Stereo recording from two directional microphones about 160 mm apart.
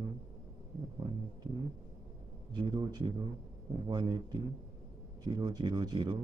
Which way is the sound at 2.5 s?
30° right (ahead or behind).